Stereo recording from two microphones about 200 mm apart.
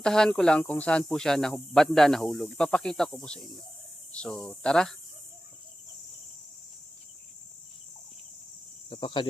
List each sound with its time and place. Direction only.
0.0 s speech: 5° left (ahead or behind)
8.9 s speech: 25° left (ahead or behind)